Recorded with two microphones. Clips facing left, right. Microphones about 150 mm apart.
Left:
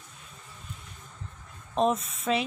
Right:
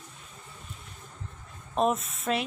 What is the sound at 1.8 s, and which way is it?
Speech, centre (ahead or behind).